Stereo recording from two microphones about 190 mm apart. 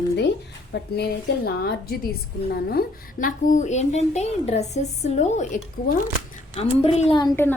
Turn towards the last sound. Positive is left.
turn(degrees=10)  # may be behind; listen again after turning